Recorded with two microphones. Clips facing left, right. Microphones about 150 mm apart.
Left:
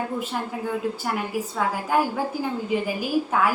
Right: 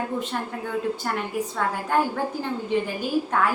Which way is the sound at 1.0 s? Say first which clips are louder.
Even; 5° left (ahead or behind).